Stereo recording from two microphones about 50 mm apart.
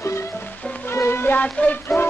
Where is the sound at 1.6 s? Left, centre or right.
Left.